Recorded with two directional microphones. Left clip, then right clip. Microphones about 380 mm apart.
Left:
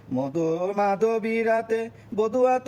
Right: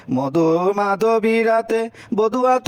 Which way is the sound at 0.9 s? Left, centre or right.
Right.